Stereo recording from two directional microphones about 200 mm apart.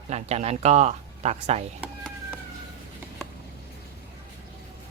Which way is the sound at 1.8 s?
5° left (ahead or behind).